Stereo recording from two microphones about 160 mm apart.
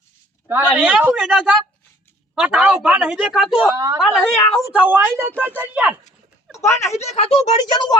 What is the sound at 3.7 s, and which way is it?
Speech, 20° right (ahead or behind).